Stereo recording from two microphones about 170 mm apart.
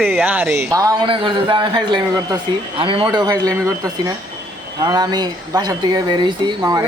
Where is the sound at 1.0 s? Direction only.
30° right (ahead or behind).